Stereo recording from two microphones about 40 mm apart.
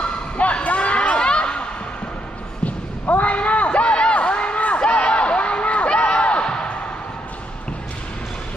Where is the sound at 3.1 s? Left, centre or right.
Left.